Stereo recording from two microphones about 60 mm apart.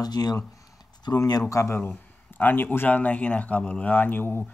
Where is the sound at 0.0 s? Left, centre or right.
Left.